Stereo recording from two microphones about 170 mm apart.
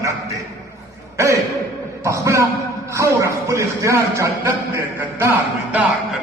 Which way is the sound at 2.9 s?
15° right (ahead or behind).